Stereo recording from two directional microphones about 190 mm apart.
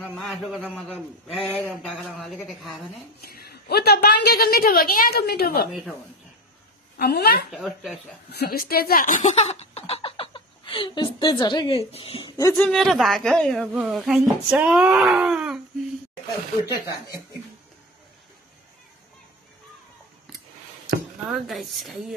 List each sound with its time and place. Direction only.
0.0 s speech: centre (ahead or behind)
3.2 s a woman's voice: 55° left (ahead or behind)
7.0 s a woman's voice: 55° left (ahead or behind)
7.5 s speech: centre (ahead or behind)
8.3 s speech: 55° left (ahead or behind); by 12.5 s 20° left (ahead or behind)
12.5 s speech: 5° left (ahead or behind)
21.3 s speech: centre (ahead or behind)